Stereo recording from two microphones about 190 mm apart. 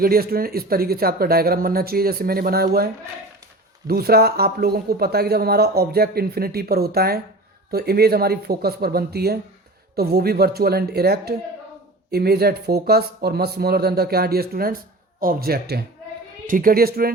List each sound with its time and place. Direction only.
0.0 s speech: 50° right (ahead or behind)